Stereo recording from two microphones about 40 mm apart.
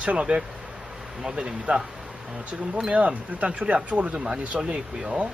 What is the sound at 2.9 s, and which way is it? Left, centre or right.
Speech, right.